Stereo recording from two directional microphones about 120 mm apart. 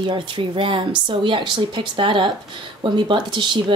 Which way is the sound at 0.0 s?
40° right (ahead or behind).